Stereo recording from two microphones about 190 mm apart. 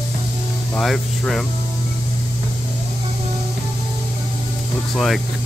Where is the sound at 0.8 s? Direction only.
Centre (ahead or behind).